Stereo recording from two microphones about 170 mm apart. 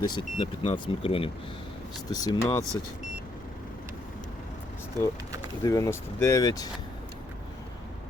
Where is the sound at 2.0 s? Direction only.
20° left (ahead or behind).